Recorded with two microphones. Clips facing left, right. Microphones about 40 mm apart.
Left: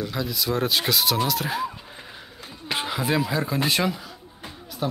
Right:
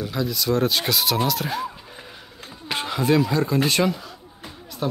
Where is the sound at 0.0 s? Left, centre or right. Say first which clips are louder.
Right 2 dB; centre.